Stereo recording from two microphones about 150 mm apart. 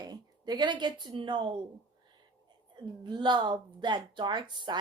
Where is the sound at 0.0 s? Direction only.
25° right (ahead or behind).